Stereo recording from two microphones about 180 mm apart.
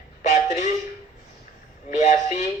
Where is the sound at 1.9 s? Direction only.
40° left (ahead or behind).